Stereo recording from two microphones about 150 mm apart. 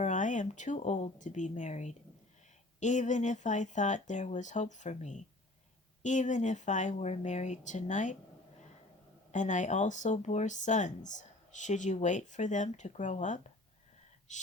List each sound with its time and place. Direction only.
0.0 s speech: 55° left (ahead or behind)
9.3 s speech: 55° left (ahead or behind)